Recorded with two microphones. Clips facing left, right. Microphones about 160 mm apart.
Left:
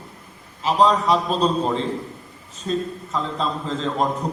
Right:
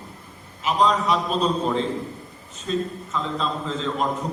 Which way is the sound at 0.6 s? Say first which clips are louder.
Left 3 dB; 35° left (ahead or behind).